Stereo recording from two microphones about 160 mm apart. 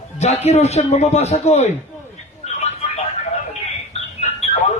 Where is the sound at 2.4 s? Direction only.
45° left (ahead or behind).